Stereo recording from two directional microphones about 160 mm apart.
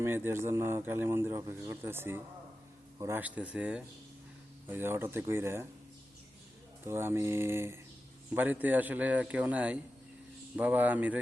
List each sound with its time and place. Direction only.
0.0 s a man's voice: 15° right (ahead or behind)
6.8 s a man's voice: 15° right (ahead or behind)